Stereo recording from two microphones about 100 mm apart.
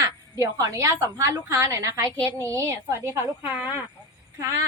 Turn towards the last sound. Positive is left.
turn(degrees=-30)  # may be behind; listen again after turning